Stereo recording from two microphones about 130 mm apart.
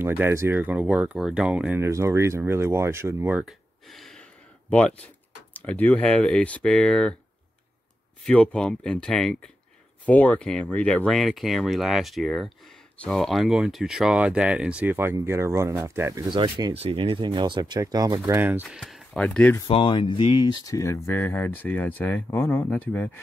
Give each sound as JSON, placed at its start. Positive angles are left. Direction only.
{"t": 0.0, "sound": "speech", "side_deg": -15}
{"t": 1.8, "sound": "speech", "side_deg": -20}
{"t": 3.3, "sound": "speech", "side_deg": 0}
{"t": 8.2, "sound": "speech", "side_deg": 10}
{"t": 16.3, "sound": "speech", "side_deg": -40}
{"t": 16.7, "sound": "speech", "side_deg": -45}
{"t": 18.8, "sound": "a sound", "side_deg": 0}
{"t": 19.2, "sound": "speech", "side_deg": 10}
{"t": 19.7, "sound": "speech", "side_deg": 45}